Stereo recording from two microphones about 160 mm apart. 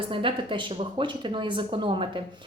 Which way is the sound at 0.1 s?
35° right (ahead or behind).